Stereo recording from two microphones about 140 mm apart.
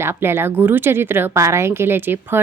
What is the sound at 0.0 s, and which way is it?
A woman's voice, 15° right (ahead or behind).